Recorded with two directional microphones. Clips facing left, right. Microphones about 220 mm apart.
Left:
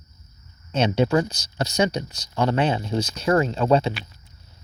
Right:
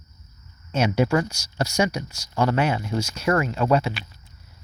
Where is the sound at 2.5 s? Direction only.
30° left (ahead or behind).